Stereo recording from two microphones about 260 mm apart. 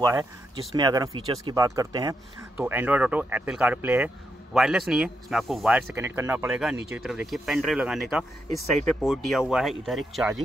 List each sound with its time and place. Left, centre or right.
0.0 s speech: centre